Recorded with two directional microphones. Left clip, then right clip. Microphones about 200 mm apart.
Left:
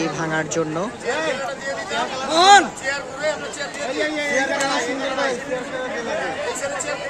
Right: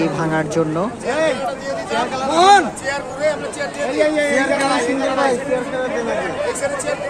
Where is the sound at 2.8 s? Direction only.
45° right (ahead or behind).